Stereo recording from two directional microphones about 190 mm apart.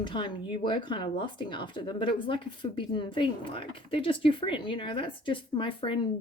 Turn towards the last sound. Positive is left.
turn(degrees=30)  # may be behind; listen again after turning